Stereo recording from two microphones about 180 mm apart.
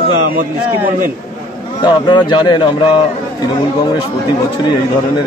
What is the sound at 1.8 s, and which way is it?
A man's voice, 25° left (ahead or behind).